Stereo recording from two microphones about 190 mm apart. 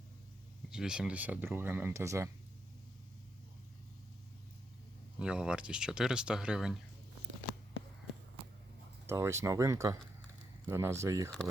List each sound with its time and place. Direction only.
0.7 s speech: 5° right (ahead or behind)
5.2 s speech: 5° right (ahead or behind)
9.0 s speech: 15° right (ahead or behind)